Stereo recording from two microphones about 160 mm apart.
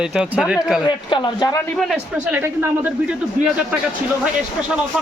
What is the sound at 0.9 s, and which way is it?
Speech, 30° left (ahead or behind).